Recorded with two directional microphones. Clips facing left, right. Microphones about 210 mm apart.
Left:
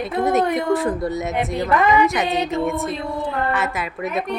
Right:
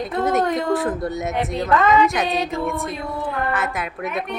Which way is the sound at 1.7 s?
15° left (ahead or behind).